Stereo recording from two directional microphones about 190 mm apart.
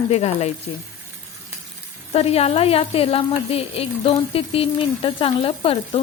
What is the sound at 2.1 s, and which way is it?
A woman's voice, 30° left (ahead or behind).